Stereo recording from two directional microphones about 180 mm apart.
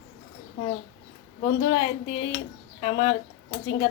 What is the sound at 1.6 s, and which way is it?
A woman's voice, 25° left (ahead or behind).